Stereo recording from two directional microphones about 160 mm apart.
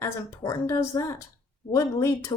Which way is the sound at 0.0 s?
20° left (ahead or behind).